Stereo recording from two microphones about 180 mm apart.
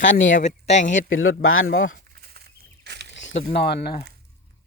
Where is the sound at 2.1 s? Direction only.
60° right (ahead or behind).